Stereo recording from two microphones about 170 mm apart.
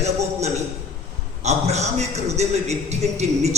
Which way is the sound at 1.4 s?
40° right (ahead or behind).